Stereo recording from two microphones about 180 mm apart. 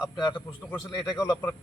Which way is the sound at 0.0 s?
25° left (ahead or behind).